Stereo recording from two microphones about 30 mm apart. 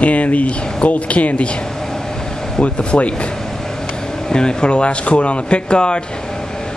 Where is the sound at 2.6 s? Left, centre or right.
Left.